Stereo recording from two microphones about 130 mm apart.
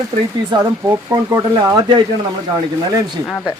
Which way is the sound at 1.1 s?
25° right (ahead or behind).